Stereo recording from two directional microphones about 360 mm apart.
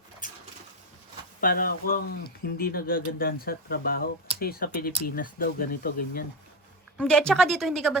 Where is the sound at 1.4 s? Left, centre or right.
Left.